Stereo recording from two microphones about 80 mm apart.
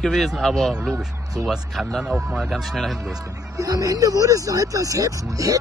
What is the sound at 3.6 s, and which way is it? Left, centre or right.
Speech, right.